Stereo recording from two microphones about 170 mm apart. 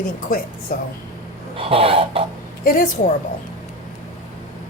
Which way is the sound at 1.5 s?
35° right (ahead or behind).